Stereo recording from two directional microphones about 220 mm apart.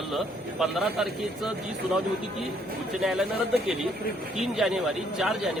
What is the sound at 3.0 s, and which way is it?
Speech, centre (ahead or behind).